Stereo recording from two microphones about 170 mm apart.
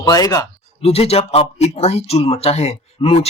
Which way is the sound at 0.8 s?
35° left (ahead or behind).